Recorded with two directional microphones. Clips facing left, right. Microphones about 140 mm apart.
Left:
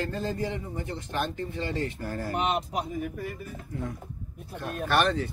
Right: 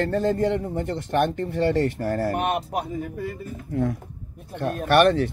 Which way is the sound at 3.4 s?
60° right (ahead or behind).